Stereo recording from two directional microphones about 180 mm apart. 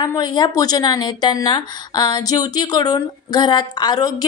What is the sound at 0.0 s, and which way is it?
A woman's voice, 25° left (ahead or behind).